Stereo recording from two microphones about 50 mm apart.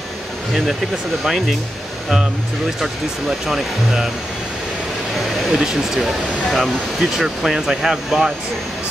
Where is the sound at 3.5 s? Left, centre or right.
Centre.